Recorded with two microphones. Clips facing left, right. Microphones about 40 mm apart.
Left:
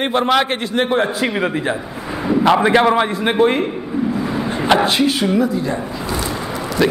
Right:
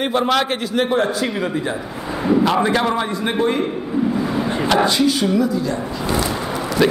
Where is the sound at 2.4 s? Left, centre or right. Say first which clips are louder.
Left 4 dB; left.